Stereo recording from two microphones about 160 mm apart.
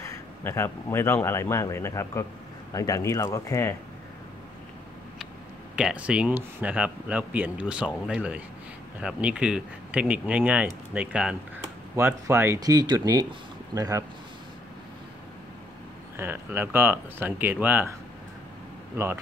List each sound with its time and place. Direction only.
0.0 s speech: 15° left (ahead or behind)
5.8 s a man's voice: 5° right (ahead or behind)
16.2 s a man's voice: 15° right (ahead or behind)